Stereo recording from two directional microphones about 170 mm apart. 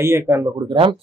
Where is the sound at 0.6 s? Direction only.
30° right (ahead or behind).